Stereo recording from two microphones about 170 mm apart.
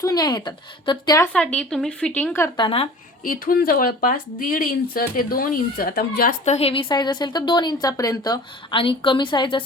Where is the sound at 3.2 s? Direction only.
55° left (ahead or behind).